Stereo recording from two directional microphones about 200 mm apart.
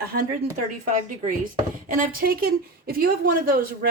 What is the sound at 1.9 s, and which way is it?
A woman's voice, 45° right (ahead or behind).